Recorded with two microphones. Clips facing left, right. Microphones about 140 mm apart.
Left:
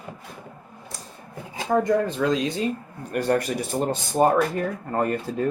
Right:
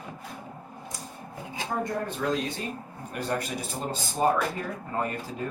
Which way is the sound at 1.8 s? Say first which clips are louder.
Left 8 dB; 90° left.